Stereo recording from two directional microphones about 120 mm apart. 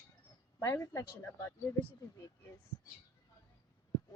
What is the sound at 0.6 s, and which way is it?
Speech, 25° left (ahead or behind).